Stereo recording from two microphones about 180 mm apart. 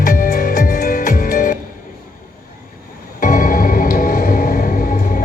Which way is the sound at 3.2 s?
45° left (ahead or behind).